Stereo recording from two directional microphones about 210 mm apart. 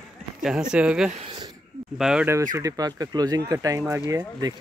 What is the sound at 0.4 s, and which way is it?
Speech, 5° right (ahead or behind).